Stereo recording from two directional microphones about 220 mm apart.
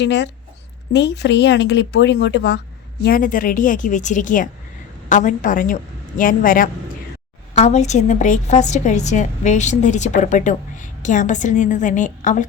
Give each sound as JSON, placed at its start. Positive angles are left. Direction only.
{"t": 0.0, "sound": "speech", "side_deg": 55}
{"t": 3.0, "sound": "a woman's voice", "side_deg": 40}